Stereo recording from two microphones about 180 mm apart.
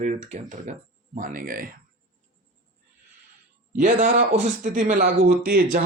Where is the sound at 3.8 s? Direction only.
45° right (ahead or behind).